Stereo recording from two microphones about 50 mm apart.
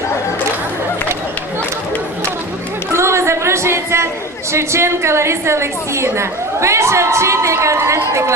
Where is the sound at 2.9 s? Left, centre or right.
Right.